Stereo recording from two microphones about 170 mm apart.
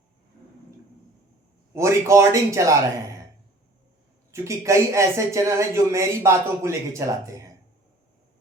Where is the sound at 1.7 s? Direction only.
15° right (ahead or behind).